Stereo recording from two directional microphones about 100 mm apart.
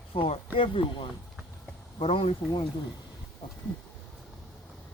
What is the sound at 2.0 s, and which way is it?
Speech, 80° left.